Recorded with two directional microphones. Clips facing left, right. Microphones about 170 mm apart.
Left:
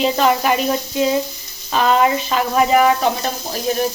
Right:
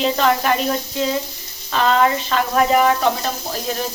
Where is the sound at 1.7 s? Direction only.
10° left (ahead or behind).